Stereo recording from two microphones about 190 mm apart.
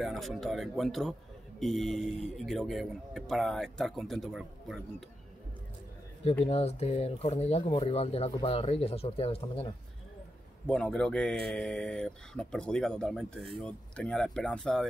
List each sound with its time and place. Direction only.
0.0 s speech: centre (ahead or behind)
6.4 s speech: 35° left (ahead or behind)
10.7 s speech: 5° left (ahead or behind)